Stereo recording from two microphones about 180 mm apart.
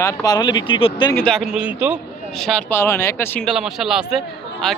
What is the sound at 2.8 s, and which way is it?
Speech, 15° left (ahead or behind).